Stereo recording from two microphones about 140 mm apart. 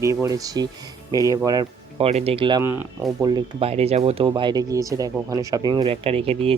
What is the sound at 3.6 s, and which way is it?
Speech, 45° right (ahead or behind).